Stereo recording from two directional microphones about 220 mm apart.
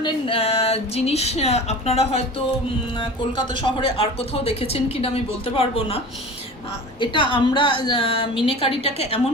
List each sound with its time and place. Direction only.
0.0 s speech: 25° left (ahead or behind)
3.5 s speech: 25° left (ahead or behind)
7.0 s speech: 20° left (ahead or behind)